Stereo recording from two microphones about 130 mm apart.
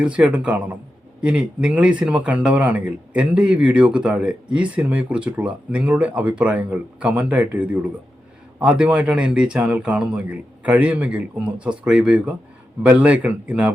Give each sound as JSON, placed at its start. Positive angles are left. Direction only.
{"t": 0.0, "sound": "speech", "side_deg": -10}